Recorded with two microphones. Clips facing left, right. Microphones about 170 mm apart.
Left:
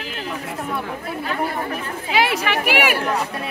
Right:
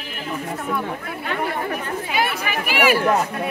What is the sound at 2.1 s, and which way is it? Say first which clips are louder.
Speech: left 5 dB; 90° left.